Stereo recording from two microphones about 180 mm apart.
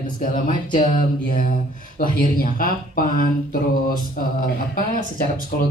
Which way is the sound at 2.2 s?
50° left (ahead or behind).